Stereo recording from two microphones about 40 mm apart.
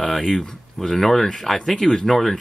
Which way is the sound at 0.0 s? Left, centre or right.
Centre.